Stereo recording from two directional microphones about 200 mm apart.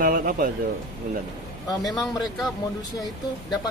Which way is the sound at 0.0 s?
45° right (ahead or behind).